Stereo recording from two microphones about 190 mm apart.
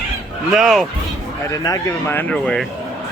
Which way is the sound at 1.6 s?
15° left (ahead or behind).